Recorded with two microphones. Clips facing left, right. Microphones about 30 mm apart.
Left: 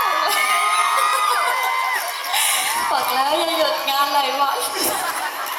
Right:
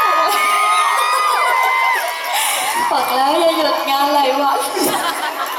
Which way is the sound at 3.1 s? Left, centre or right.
Centre.